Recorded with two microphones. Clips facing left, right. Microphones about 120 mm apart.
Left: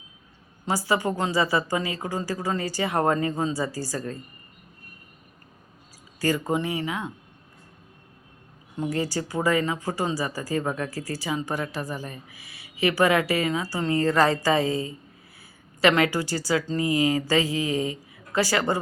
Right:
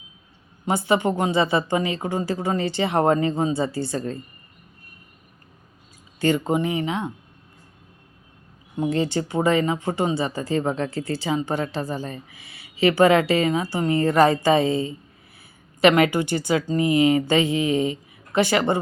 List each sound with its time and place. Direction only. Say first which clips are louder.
0.6 s speech: right 4 dB; 25° right (ahead or behind)
6.1 s speech: right 4 dB; 25° right (ahead or behind)
8.8 s speech: right 4 dB; 25° right (ahead or behind)